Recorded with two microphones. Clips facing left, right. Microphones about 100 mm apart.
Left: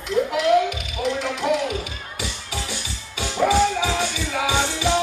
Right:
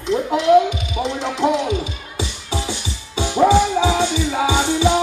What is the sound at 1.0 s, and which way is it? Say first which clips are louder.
Music: right 4 dB; 25° right (ahead or behind).